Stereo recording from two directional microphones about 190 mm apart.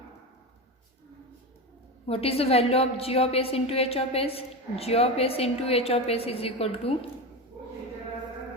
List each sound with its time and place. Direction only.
2.0 s a woman's voice: 30° left (ahead or behind)